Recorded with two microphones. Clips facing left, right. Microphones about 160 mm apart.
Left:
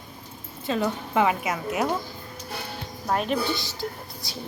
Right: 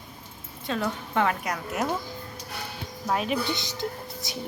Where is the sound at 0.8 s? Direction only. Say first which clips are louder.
Left 3 dB; 5° left (ahead or behind).